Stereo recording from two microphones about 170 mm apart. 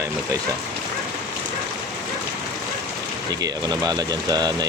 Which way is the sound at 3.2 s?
20° right (ahead or behind).